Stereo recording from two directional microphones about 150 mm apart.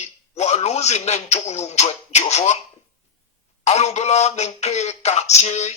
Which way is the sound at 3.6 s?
45° left (ahead or behind).